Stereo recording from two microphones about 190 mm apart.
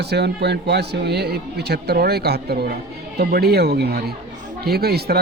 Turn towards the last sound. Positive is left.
turn(degrees=-55)  # may be behind; listen again after turning